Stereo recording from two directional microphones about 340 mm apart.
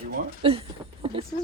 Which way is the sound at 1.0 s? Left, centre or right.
Centre.